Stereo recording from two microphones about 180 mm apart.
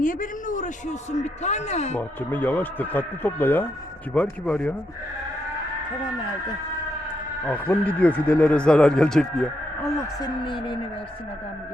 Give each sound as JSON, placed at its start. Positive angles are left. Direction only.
{"t": 0.0, "sound": "a man's voice", "side_deg": 50}
{"t": 2.0, "sound": "speech", "side_deg": 10}
{"t": 7.4, "sound": "speech", "side_deg": 10}
{"t": 10.2, "sound": "speech", "side_deg": 25}